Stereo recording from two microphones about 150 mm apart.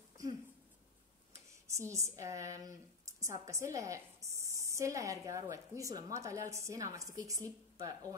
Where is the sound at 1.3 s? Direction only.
20° right (ahead or behind).